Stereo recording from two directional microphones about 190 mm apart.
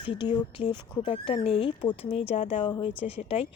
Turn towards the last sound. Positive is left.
turn(degrees=30)  # may be behind; listen again after turning